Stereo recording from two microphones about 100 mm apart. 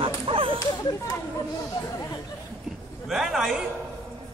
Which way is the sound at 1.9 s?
35° left (ahead or behind).